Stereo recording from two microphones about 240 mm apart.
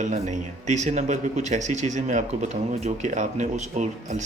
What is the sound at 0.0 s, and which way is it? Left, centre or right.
Speech, right.